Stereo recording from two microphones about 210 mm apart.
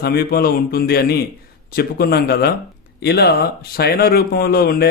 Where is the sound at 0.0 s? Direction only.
45° left (ahead or behind).